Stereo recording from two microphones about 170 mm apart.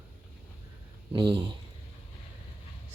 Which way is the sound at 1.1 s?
25° right (ahead or behind).